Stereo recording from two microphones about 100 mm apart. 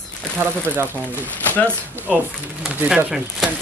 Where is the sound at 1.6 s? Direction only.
20° right (ahead or behind).